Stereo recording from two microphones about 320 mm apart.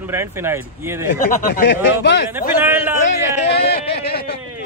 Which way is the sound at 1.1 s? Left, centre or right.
Left.